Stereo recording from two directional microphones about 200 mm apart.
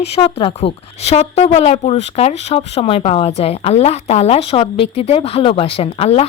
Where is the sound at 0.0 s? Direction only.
30° left (ahead or behind).